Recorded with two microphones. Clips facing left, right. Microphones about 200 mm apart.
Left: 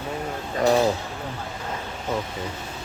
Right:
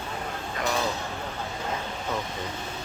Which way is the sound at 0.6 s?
35° left (ahead or behind).